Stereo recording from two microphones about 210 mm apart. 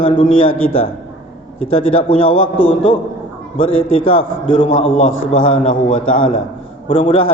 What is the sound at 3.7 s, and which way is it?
Speech, 75° left (ahead or behind).